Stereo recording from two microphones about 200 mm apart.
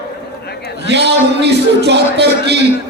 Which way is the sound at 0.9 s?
55° right (ahead or behind).